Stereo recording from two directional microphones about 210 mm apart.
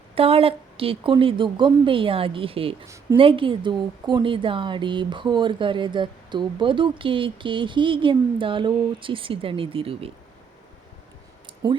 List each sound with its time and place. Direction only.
0.2 s a woman's voice: 25° right (ahead or behind)
2.8 s speech: 15° right (ahead or behind)
3.2 s a woman's voice: 25° right (ahead or behind)